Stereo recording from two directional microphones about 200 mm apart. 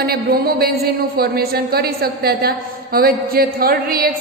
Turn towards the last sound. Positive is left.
turn(degrees=-45)  # may be behind; listen again after turning